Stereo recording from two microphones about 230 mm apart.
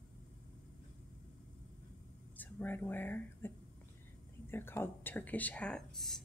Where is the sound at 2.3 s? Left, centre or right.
Centre.